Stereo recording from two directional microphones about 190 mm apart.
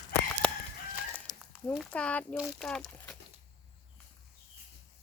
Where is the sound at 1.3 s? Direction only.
20° left (ahead or behind).